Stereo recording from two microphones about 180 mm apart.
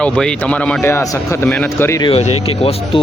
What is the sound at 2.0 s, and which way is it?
Speech, 35° left (ahead or behind).